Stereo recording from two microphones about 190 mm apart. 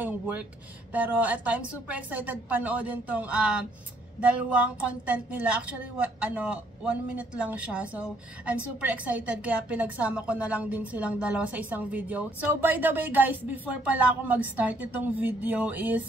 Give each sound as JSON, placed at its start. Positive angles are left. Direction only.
{"t": 0.0, "sound": "a woman's voice", "side_deg": -10}